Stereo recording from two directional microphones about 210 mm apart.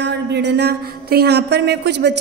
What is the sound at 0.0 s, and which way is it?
Speech, 55° right (ahead or behind).